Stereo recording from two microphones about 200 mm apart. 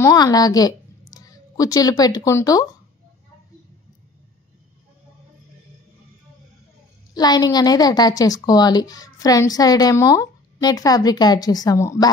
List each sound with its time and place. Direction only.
0.0 s a woman's voice: 15° left (ahead or behind)
7.2 s a woman's voice: 20° left (ahead or behind)